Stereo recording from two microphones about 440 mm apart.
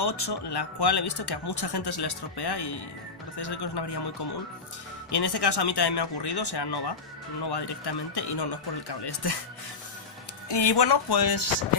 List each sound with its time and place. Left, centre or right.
0.3 s speech: left
10.5 s speech: left